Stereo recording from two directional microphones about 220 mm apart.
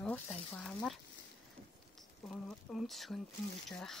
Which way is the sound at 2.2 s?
Centre (ahead or behind).